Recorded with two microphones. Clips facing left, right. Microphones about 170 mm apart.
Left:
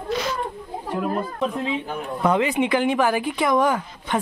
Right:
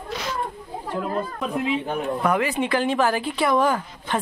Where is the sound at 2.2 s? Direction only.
20° left (ahead or behind).